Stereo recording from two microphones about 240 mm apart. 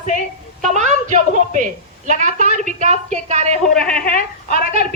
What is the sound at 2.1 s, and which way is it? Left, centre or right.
Speech, right.